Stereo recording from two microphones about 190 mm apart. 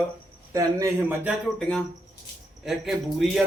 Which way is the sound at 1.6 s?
5° left (ahead or behind).